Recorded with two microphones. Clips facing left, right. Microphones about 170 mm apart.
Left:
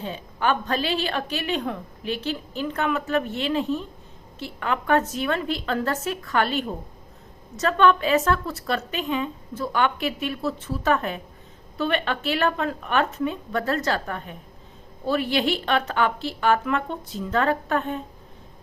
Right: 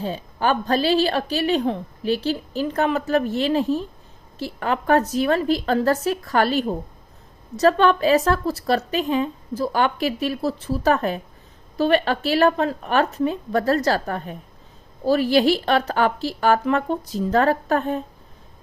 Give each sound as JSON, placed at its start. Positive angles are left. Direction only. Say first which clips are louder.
{"t": 0.0, "sound": "a woman's voice", "louder": "right 3 dB", "side_deg": -35}